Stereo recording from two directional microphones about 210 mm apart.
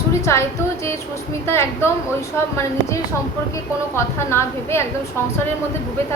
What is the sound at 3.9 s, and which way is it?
Speech, 10° left (ahead or behind).